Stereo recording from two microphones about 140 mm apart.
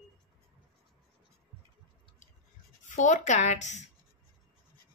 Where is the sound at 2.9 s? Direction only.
60° left (ahead or behind).